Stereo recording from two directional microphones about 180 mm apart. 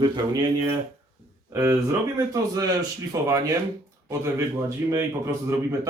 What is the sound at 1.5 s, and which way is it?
Speech, 15° right (ahead or behind).